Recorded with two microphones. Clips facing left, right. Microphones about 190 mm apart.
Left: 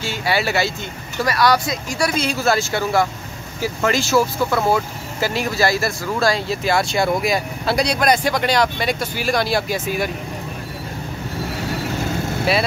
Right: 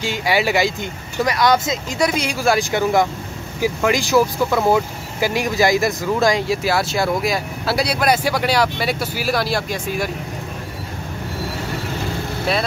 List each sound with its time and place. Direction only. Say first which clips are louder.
0.0 s speech: right 2 dB; 15° right (ahead or behind); by 10.1 s centre (ahead or behind)